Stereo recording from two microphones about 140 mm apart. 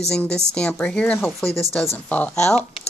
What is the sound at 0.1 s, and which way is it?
Speech, 10° left (ahead or behind).